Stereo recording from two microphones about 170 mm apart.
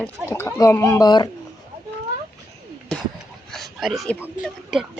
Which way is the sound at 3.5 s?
Centre (ahead or behind).